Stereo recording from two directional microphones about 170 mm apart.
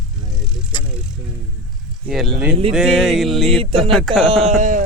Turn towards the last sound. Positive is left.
turn(degrees=-45)  # may be behind; listen again after turning